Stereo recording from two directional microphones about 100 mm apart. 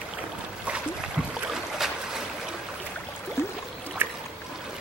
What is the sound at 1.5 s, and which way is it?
Boat, 5° right (ahead or behind).